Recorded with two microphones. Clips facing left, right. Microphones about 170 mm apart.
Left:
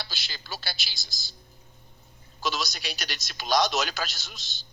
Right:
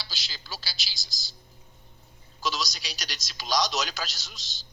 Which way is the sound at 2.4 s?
60° left (ahead or behind).